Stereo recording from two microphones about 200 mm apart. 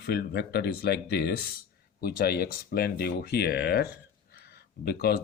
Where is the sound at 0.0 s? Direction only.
50° left (ahead or behind).